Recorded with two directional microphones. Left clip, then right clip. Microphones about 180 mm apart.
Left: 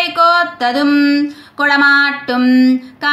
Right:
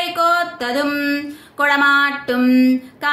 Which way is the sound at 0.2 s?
25° right (ahead or behind).